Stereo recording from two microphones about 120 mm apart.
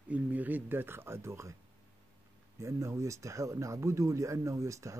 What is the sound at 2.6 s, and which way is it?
Speech, 25° right (ahead or behind).